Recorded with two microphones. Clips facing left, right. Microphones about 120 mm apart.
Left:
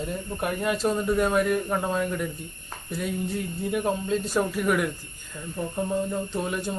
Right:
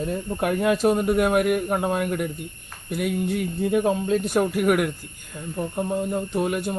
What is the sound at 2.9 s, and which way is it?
Speech, 65° right (ahead or behind).